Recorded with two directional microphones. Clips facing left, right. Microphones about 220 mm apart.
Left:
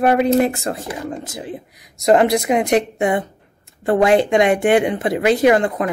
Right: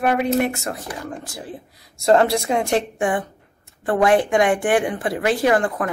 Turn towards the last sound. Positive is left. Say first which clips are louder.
# left 4 dB
turn(degrees=20)  # may be behind; listen again after turning